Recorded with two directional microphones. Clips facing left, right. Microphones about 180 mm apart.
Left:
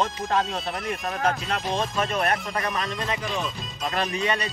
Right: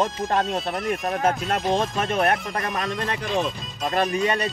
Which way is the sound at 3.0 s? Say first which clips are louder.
Right 1 dB; 60° right (ahead or behind).